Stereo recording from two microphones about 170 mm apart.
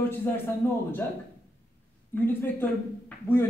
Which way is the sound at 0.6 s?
15° left (ahead or behind).